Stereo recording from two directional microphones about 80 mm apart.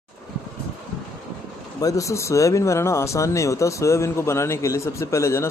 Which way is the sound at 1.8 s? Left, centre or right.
Left.